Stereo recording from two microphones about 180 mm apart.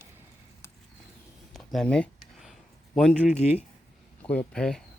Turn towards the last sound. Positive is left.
turn(degrees=5)  # may be behind; listen again after turning